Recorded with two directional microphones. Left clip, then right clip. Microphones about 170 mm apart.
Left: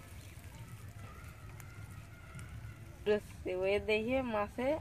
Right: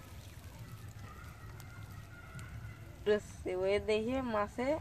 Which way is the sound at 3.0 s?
30° left (ahead or behind).